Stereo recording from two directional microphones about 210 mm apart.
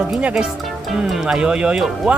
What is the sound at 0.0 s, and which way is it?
Speech, 5° right (ahead or behind).